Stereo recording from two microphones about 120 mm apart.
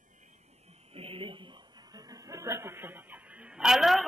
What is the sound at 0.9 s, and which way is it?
Chuckle, 50° right (ahead or behind).